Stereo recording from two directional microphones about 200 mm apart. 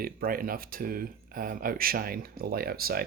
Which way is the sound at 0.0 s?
45° right (ahead or behind).